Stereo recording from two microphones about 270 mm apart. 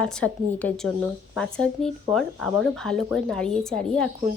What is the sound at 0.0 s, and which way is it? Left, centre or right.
A woman's voice, centre.